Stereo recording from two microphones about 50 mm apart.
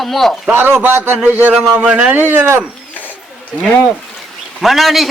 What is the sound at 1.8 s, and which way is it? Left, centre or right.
Speech, centre.